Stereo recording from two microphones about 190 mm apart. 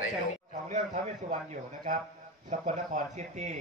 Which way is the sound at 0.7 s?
40° right (ahead or behind).